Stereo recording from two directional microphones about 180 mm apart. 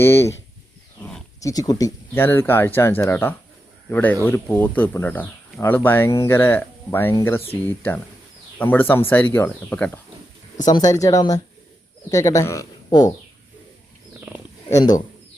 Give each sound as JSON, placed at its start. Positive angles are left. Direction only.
{"t": 0.0, "sound": "speech", "side_deg": 15}
{"t": 0.9, "sound": "roaring cats", "side_deg": 5}
{"t": 1.4, "sound": "speech", "side_deg": 20}
{"t": 10.7, "sound": "speech", "side_deg": 20}
{"t": 14.7, "sound": "speech", "side_deg": 20}